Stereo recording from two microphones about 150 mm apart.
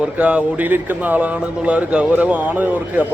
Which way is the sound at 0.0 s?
10° right (ahead or behind).